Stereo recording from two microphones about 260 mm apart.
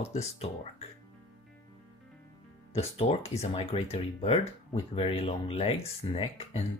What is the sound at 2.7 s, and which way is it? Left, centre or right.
Speech, left.